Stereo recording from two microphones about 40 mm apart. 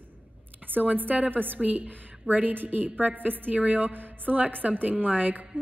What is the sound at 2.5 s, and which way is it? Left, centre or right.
A woman's voice, right.